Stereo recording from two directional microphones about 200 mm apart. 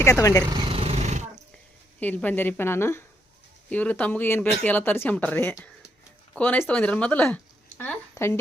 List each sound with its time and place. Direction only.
0.0 s speech: 15° left (ahead or behind)
0.5 s a sound: 25° right (ahead or behind)
2.0 s speech: 10° left (ahead or behind)